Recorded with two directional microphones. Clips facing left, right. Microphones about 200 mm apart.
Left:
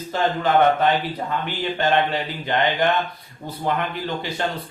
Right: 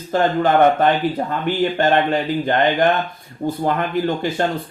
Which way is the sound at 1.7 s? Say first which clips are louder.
Even; 45° right (ahead or behind).